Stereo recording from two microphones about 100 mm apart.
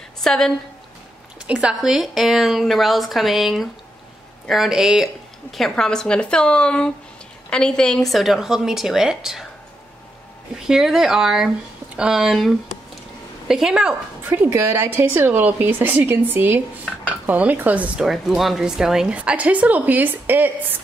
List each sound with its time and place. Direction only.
0.2 s a woman's voice: 5° left (ahead or behind)
1.5 s a woman's voice: 10° right (ahead or behind)
10.7 s a woman's voice: 5° right (ahead or behind)
14.2 s a woman's voice: 20° right (ahead or behind)
18.0 s a woman's voice: 5° right (ahead or behind); by 20.5 s 20° right (ahead or behind)